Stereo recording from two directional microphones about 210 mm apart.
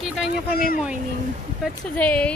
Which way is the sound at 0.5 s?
45° left (ahead or behind).